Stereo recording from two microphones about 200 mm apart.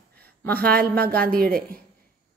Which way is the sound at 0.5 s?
50° right (ahead or behind).